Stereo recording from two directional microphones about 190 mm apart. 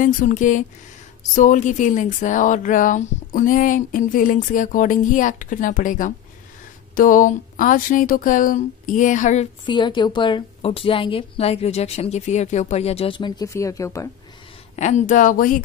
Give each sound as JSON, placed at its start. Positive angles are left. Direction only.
{"t": 0.0, "sound": "speech", "side_deg": 45}
{"t": 9.7, "sound": "a woman's voice", "side_deg": 25}
{"t": 14.8, "sound": "speech", "side_deg": 40}